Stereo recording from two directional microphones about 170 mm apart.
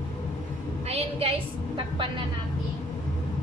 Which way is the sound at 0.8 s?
35° right (ahead or behind).